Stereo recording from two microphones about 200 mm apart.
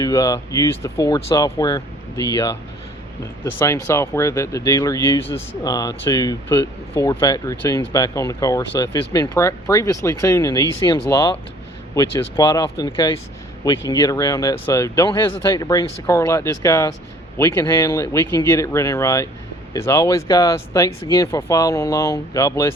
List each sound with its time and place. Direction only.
0.0 s speech: 15° left (ahead or behind)